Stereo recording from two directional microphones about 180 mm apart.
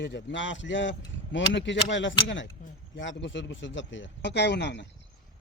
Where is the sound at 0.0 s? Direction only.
85° left.